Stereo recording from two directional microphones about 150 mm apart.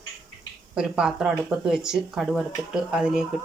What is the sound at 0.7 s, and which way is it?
A woman's voice, 5° right (ahead or behind).